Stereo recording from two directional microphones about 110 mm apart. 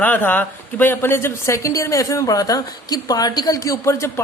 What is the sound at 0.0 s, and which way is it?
A woman's voice, 15° left (ahead or behind).